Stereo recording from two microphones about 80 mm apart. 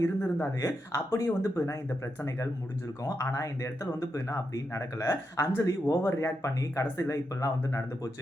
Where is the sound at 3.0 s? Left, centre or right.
Left.